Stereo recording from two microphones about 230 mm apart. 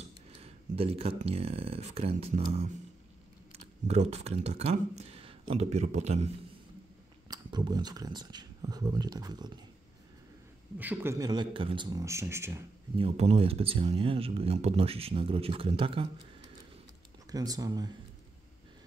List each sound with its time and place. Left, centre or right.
0.3 s speech: right
7.2 s speech: centre
10.8 s speech: centre
12.9 s speech: right
17.3 s speech: centre